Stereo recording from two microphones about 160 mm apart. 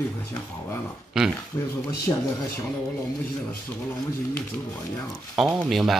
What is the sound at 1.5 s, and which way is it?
Speech, 25° left (ahead or behind).